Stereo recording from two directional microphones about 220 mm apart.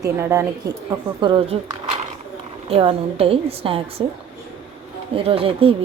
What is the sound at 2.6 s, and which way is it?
A woman's voice, 25° right (ahead or behind).